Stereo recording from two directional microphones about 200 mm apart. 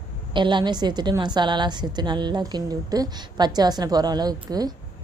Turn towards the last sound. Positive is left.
turn(degrees=-20)  # may be behind; listen again after turning